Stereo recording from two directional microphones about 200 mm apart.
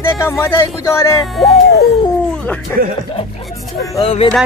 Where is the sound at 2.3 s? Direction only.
5° left (ahead or behind).